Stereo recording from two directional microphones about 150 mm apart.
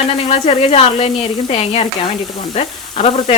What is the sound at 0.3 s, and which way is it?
Speech, 40° left (ahead or behind).